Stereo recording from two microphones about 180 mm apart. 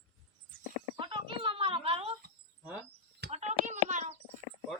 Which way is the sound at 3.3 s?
40° right (ahead or behind).